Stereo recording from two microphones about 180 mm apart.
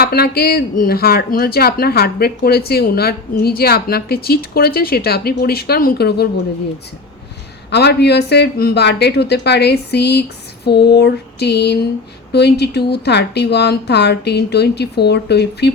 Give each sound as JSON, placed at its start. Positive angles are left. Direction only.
{"t": 0.0, "sound": "speech", "side_deg": 60}
{"t": 7.7, "sound": "speech", "side_deg": 70}